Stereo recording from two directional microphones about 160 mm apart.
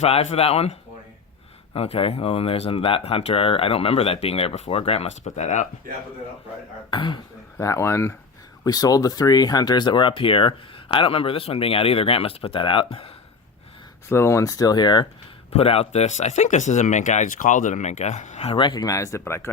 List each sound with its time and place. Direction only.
0.0 s speech: 40° left (ahead or behind)
6.9 s speech: 30° left (ahead or behind)
7.6 s speech: 20° left (ahead or behind); by 13.1 s 35° left (ahead or behind)
14.1 s speech: 15° left (ahead or behind)
15.5 s speech: 40° left (ahead or behind)
18.5 s speech: 30° left (ahead or behind)